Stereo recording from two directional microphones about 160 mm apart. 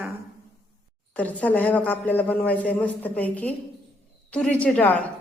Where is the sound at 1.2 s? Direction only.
10° left (ahead or behind).